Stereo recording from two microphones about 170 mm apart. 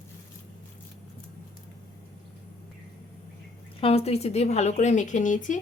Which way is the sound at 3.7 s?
35° left (ahead or behind).